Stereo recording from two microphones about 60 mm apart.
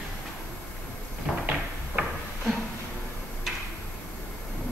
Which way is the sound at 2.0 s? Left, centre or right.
Right.